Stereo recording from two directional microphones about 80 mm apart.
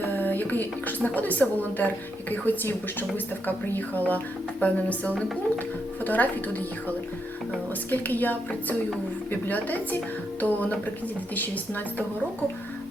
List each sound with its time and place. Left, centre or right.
0.0 s a woman's voice: left